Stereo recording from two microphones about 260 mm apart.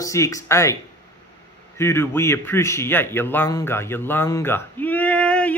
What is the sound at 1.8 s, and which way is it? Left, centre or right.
A man's voice, centre.